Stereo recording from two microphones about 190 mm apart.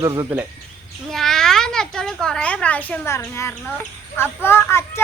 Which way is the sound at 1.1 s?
Centre (ahead or behind).